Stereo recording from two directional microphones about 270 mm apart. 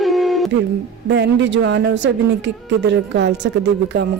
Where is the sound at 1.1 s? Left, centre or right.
Right.